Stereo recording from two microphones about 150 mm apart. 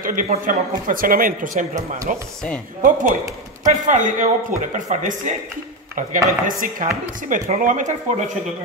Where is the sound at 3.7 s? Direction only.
60° right (ahead or behind).